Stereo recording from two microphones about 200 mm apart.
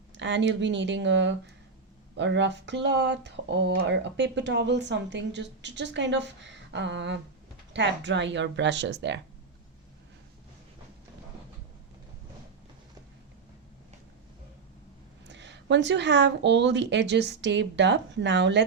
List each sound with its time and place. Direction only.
0.1 s speech: 65° right (ahead or behind)
15.3 s speech: 60° right (ahead or behind)